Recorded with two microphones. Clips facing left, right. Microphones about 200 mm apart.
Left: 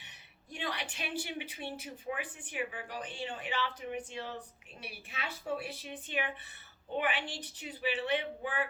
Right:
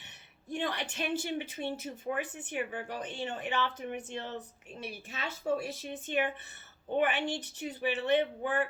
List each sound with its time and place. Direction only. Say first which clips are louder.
0.5 s speech: right 5 dB; 50° right (ahead or behind)